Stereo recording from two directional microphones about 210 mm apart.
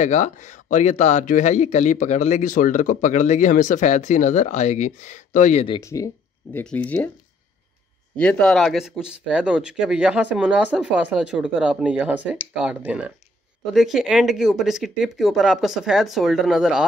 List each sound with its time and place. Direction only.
0.0 s speech: 35° left (ahead or behind)
5.8 s speech: 15° left (ahead or behind)
8.2 s speech: 5° left (ahead or behind)